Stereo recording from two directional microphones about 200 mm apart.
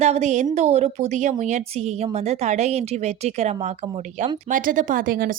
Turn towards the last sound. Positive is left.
turn(degrees=-45)  # may be behind; listen again after turning